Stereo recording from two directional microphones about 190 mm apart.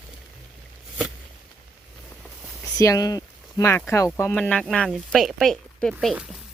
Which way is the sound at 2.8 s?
15° left (ahead or behind).